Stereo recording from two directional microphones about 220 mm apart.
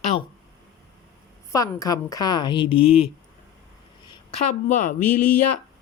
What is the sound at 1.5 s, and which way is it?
Speech, 15° left (ahead or behind).